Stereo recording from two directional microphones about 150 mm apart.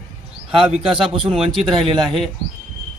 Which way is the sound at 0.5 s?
40° right (ahead or behind).